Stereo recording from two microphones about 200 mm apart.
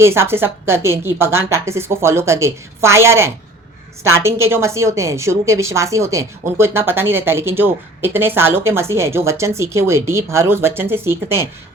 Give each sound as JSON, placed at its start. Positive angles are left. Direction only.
{"t": 0.0, "sound": "a woman's voice", "side_deg": -10}